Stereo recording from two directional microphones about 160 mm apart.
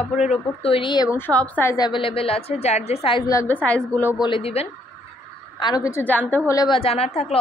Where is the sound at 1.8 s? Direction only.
30° left (ahead or behind).